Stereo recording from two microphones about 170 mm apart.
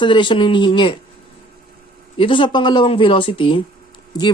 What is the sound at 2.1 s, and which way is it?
Speech, 30° left (ahead or behind).